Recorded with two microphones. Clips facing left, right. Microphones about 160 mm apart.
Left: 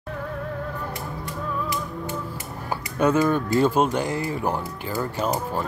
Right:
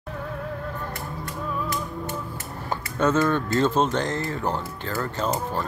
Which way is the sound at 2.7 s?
15° left (ahead or behind).